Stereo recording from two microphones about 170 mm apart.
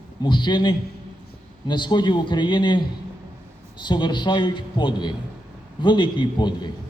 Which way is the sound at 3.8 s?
25° left (ahead or behind).